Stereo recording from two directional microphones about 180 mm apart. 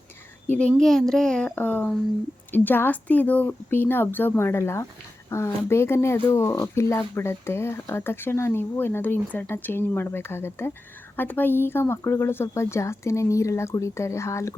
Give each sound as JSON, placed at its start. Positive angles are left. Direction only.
{"t": 0.8, "sound": "speech", "side_deg": 0}